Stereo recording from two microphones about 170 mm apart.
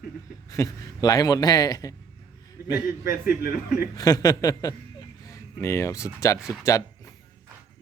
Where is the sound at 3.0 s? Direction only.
60° left (ahead or behind).